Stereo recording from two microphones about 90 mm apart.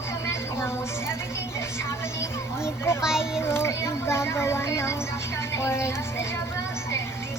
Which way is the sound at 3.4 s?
25° left (ahead or behind).